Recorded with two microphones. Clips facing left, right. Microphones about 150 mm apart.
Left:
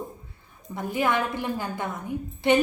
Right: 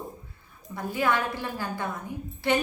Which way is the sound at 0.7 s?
20° left (ahead or behind).